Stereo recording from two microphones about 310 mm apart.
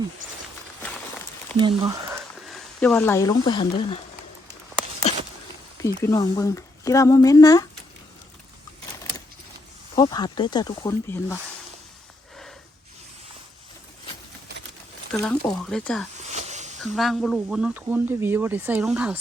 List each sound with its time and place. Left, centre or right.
1.5 s speech: centre
2.5 s speech: centre
5.8 s speech: centre
9.9 s speech: centre
15.2 s speech: centre
16.1 s a sound: right
16.7 s speech: centre